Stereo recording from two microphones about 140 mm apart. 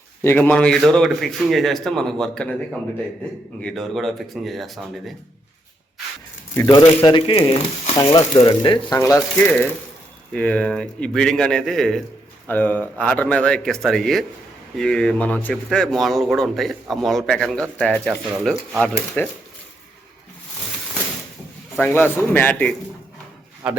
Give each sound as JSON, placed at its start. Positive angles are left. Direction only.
{"t": 0.2, "sound": "speech", "side_deg": 15}
{"t": 3.6, "sound": "speech", "side_deg": 5}
{"t": 6.7, "sound": "speech", "side_deg": 35}
{"t": 7.9, "sound": "speech", "side_deg": 25}
{"t": 9.0, "sound": "a man's voice", "side_deg": 20}
{"t": 21.8, "sound": "a man's voice", "side_deg": 15}